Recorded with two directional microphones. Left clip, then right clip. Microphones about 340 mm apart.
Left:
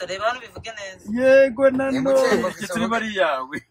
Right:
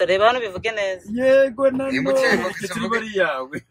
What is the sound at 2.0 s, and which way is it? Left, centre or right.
Speech, centre.